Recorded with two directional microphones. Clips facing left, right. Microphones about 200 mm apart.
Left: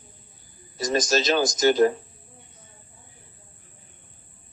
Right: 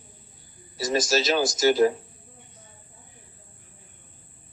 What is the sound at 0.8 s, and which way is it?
Speech, 5° right (ahead or behind).